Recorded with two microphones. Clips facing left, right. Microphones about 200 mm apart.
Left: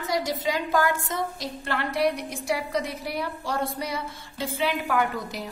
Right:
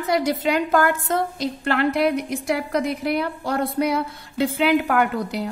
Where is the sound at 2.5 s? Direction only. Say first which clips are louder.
Right 6 dB; 65° right (ahead or behind).